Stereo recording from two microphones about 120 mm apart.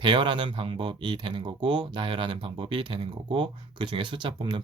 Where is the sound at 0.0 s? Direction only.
45° right (ahead or behind).